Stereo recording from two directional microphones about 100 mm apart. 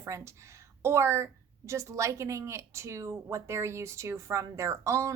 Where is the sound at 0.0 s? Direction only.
30° right (ahead or behind).